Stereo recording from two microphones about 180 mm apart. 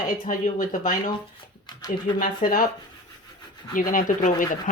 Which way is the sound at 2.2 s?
50° left (ahead or behind).